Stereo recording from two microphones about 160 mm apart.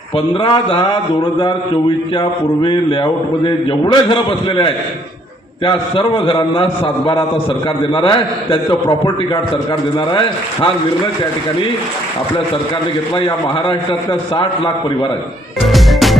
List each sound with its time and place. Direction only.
0.3 s a man's voice: 35° left (ahead or behind)
13.1 s a man's voice: 35° left (ahead or behind)
15.6 s music: centre (ahead or behind)